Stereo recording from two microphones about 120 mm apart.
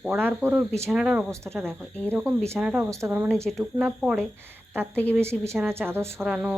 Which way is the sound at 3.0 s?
20° right (ahead or behind).